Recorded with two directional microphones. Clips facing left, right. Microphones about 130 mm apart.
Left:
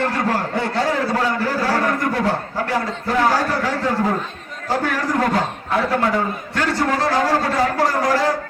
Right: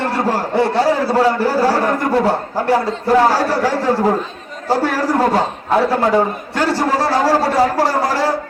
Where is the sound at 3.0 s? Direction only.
35° right (ahead or behind).